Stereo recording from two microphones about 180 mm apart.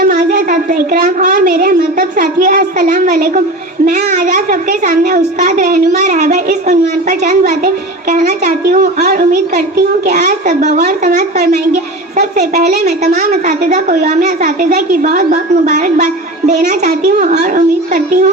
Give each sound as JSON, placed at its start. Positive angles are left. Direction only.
{"t": 0.0, "sound": "a woman's voice", "side_deg": -50}
{"t": 8.4, "sound": "a woman's voice", "side_deg": -55}
{"t": 12.5, "sound": "a woman's voice", "side_deg": -60}
{"t": 13.1, "sound": "a woman's voice", "side_deg": -45}